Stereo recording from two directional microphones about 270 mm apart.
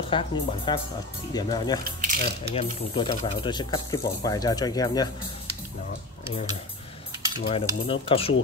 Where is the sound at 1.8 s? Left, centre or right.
Right.